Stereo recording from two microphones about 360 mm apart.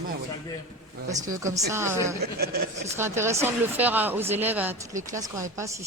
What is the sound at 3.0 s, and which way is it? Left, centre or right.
Speech, centre.